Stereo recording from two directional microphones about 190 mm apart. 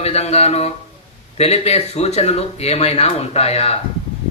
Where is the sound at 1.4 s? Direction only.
35° left (ahead or behind).